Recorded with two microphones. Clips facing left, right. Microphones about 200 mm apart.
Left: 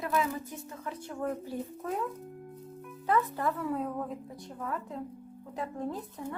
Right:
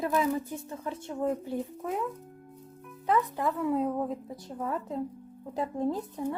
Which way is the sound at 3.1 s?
15° right (ahead or behind).